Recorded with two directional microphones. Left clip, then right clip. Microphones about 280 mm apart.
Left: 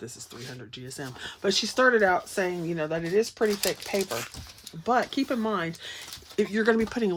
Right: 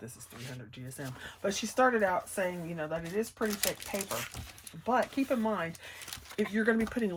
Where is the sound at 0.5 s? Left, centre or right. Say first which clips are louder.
Left 6 dB; left.